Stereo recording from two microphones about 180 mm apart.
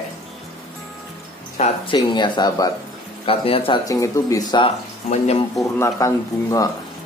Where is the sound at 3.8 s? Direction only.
15° left (ahead or behind).